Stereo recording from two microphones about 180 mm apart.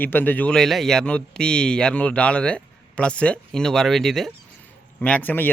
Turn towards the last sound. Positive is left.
turn(degrees=10)  # may be behind; listen again after turning